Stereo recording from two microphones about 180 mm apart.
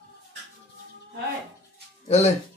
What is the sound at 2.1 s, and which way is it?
Speech, 35° left (ahead or behind).